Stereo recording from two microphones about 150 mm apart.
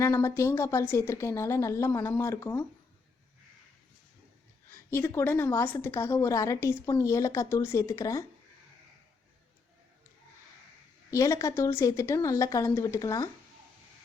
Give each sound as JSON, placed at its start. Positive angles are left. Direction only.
{"t": 0.0, "sound": "a woman's voice", "side_deg": 20}
{"t": 4.9, "sound": "a woman's voice", "side_deg": 15}
{"t": 11.1, "sound": "a woman's voice", "side_deg": 20}